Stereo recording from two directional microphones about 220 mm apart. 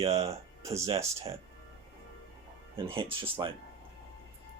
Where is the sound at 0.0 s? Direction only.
30° right (ahead or behind).